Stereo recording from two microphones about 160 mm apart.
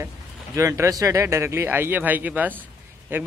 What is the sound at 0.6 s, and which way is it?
Speech, 20° right (ahead or behind).